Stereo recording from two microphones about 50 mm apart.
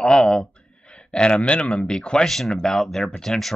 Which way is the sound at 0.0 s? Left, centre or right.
Centre.